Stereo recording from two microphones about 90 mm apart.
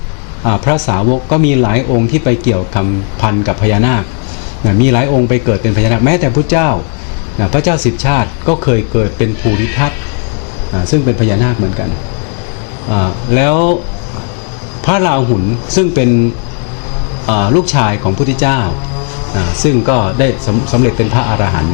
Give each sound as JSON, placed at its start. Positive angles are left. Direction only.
{"t": 0.4, "sound": "speech", "side_deg": 20}
{"t": 11.3, "sound": "speech", "side_deg": 20}
{"t": 12.9, "sound": "speech", "side_deg": 20}
{"t": 14.8, "sound": "speech", "side_deg": 15}
{"t": 17.2, "sound": "speech", "side_deg": 20}